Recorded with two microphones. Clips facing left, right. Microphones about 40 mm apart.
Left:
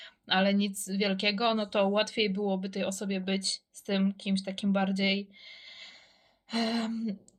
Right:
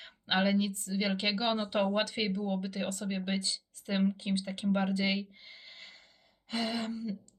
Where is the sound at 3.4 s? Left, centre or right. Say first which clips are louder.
Even; centre.